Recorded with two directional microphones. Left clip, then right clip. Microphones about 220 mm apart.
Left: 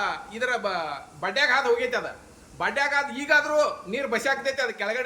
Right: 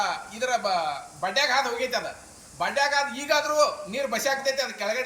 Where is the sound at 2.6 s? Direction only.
10° left (ahead or behind).